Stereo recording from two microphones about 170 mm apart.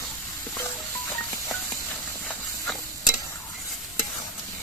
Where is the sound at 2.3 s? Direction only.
5° left (ahead or behind).